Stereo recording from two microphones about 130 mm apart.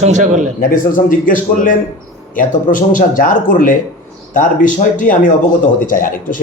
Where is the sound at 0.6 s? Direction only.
90° left.